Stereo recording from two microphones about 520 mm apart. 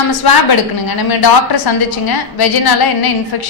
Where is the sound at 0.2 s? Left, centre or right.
Left.